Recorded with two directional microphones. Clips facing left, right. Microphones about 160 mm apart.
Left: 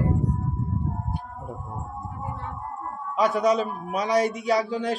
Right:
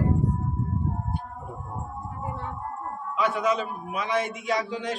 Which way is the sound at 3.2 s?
40° left (ahead or behind).